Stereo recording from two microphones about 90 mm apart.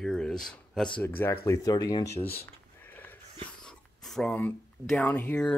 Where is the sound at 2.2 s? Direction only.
25° left (ahead or behind).